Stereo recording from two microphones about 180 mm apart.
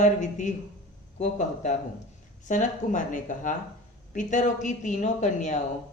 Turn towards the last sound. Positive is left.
turn(degrees=40)  # may be behind; listen again after turning